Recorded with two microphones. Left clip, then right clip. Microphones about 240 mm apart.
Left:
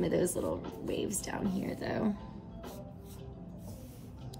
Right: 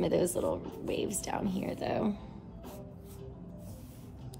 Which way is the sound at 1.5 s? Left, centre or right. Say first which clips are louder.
Right 2 dB; right.